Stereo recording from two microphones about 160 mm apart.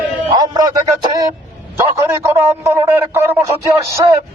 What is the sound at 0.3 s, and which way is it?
A man's voice, 25° right (ahead or behind).